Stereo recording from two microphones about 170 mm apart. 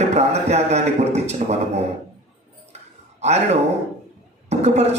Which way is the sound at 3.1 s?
40° right (ahead or behind).